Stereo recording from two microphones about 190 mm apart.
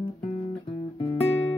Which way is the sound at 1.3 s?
10° left (ahead or behind).